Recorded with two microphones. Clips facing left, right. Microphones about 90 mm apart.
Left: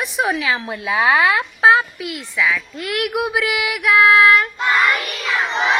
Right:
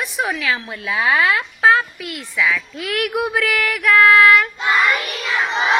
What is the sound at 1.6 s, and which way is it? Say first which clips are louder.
A woman's voice: left 2 dB; 5° left (ahead or behind).